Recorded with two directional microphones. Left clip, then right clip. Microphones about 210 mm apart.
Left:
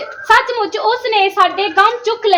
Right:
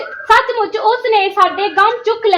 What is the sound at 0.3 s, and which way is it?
A woman's voice, 40° left (ahead or behind).